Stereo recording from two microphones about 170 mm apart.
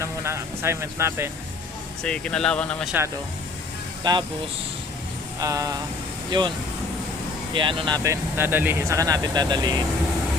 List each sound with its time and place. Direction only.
0.0 s speech: 15° right (ahead or behind)
2.0 s speech: 5° left (ahead or behind)
4.1 s speech: 25° right (ahead or behind)
5.4 s speech: 20° right (ahead or behind)
7.5 s speech: 30° right (ahead or behind)